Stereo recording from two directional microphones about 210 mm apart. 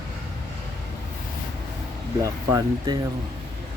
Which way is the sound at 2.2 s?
20° right (ahead or behind).